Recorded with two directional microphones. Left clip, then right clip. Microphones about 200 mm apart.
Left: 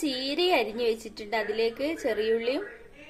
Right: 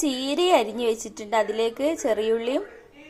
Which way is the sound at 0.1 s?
15° right (ahead or behind).